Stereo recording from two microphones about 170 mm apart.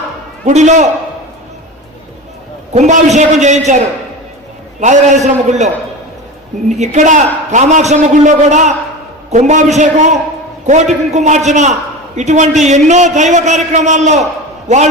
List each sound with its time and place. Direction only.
0.4 s a man's voice: 45° right (ahead or behind)
2.7 s a man's voice: 45° right (ahead or behind)